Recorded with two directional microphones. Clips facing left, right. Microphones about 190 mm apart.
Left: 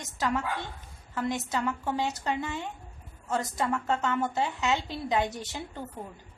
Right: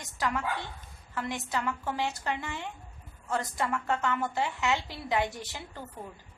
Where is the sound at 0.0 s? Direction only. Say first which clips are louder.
Left 2 dB; 25° left (ahead or behind).